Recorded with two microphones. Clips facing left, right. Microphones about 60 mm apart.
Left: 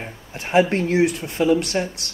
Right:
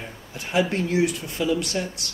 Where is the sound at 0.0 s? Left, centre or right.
Left.